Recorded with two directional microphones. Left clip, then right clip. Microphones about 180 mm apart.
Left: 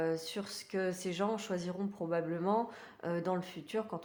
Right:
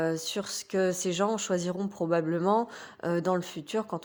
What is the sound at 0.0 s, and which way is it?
A woman's voice, 40° right (ahead or behind).